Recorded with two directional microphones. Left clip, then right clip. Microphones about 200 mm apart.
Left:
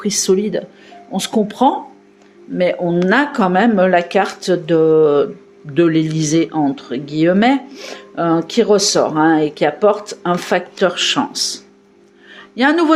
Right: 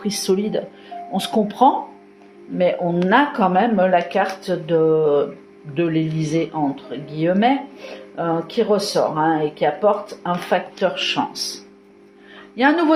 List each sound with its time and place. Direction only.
0.0 s speech: 40° left (ahead or behind)
12.5 s speech: 35° left (ahead or behind)